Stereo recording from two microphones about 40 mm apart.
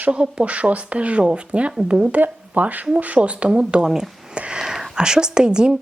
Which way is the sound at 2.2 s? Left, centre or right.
Right.